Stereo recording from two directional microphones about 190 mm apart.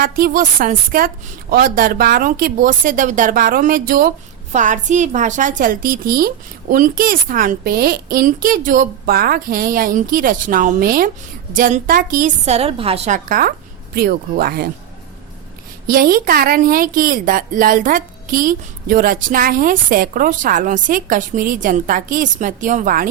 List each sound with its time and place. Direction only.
0.0 s a woman's voice: 50° right (ahead or behind)
15.9 s a woman's voice: 50° right (ahead or behind)